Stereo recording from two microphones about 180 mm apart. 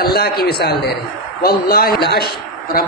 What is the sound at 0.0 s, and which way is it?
A man's voice, 55° left (ahead or behind).